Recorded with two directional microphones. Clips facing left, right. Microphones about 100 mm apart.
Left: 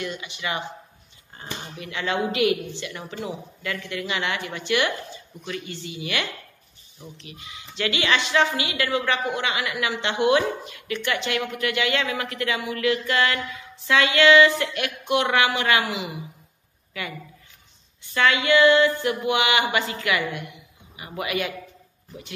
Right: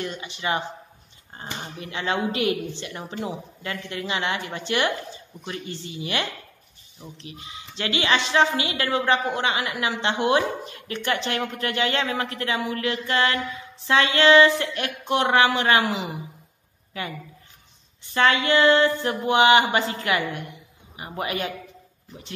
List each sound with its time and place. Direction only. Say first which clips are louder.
0.0 s a woman's voice: right 1 dB; 30° right (ahead or behind)
7.2 s a woman's voice: right 2 dB; 30° right (ahead or behind)
18.1 s a woman's voice: even; 35° right (ahead or behind)